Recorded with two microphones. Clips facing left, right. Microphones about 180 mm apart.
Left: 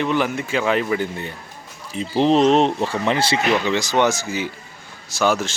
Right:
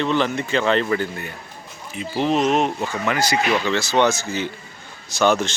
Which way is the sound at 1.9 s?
30° left (ahead or behind).